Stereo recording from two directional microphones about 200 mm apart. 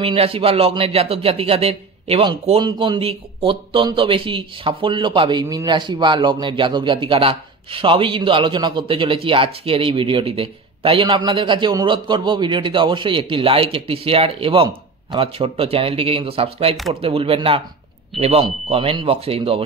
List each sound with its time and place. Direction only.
0.0 s speech: 30° right (ahead or behind)